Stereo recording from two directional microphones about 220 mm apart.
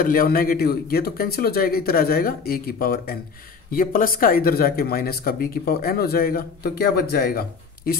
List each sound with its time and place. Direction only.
0.0 s speech: 40° left (ahead or behind)